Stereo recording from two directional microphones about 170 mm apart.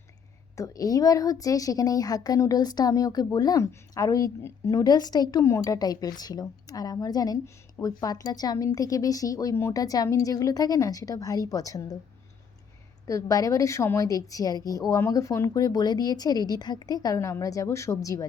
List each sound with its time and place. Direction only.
0.5 s speech: 20° left (ahead or behind)
13.1 s speech: 20° left (ahead or behind)